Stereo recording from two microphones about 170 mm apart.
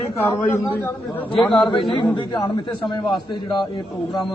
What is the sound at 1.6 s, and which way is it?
A man's voice, 30° left (ahead or behind).